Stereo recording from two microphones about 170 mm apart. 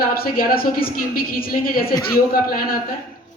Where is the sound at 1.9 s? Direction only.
20° left (ahead or behind).